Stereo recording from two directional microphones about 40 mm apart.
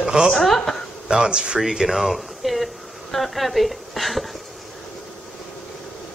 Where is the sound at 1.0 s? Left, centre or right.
Centre.